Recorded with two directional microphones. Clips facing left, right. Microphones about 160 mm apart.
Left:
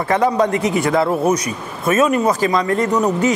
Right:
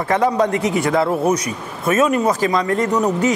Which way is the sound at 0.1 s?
15° left (ahead or behind).